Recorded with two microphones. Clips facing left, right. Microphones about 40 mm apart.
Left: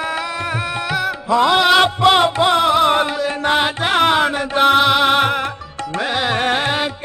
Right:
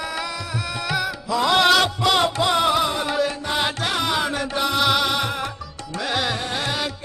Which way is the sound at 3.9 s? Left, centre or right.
Left.